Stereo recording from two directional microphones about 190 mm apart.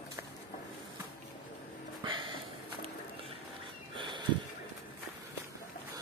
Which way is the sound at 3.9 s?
25° right (ahead or behind).